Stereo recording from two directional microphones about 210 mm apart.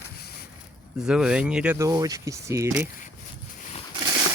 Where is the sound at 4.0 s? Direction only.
15° right (ahead or behind).